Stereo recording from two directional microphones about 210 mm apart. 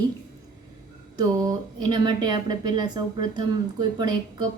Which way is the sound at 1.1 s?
20° right (ahead or behind).